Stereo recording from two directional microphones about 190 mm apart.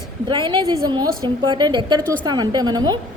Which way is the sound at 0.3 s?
25° right (ahead or behind).